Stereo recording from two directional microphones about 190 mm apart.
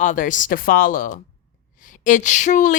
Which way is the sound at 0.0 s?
40° left (ahead or behind).